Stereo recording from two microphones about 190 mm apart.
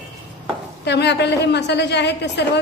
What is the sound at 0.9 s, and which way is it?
A woman's voice, 65° left (ahead or behind).